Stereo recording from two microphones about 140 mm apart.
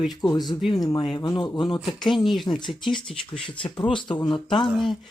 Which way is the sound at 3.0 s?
35° left (ahead or behind).